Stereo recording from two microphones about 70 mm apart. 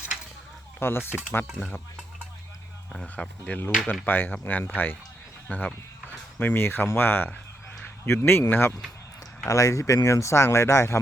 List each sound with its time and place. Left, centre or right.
0.8 s speech: left
2.9 s speech: centre
4.0 s speech: left
9.5 s speech: left